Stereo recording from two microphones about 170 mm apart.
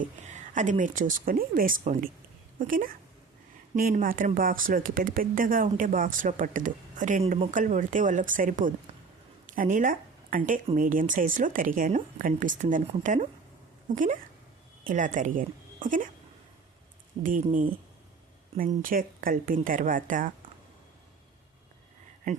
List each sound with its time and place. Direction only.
0.0 s a woman's voice: 45° right (ahead or behind)
17.2 s speech: 50° right (ahead or behind)
18.8 s speech: 55° right (ahead or behind)